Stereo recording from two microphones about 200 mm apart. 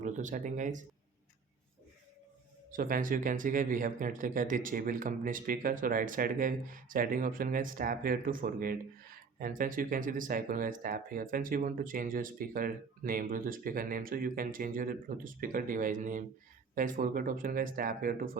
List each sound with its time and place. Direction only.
0.0 s speech: 40° right (ahead or behind)
2.7 s speech: 40° right (ahead or behind)